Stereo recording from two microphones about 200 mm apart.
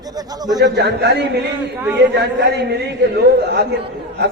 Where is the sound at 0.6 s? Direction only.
60° right (ahead or behind).